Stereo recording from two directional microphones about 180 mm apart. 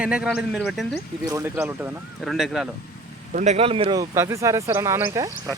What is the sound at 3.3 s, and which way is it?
Speech, 35° right (ahead or behind).